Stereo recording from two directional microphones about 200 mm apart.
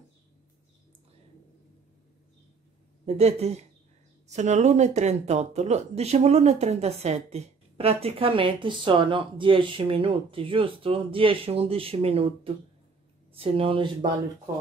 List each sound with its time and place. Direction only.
3.1 s a woman's voice: 30° right (ahead or behind)